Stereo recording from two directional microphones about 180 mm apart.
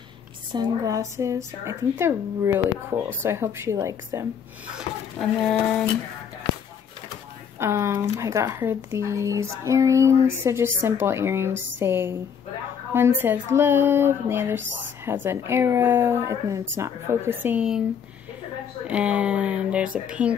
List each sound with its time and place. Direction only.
0.5 s speech: 20° right (ahead or behind)
4.7 s speech: centre (ahead or behind)
7.5 s speech: 15° right (ahead or behind)
18.9 s speech: 5° right (ahead or behind)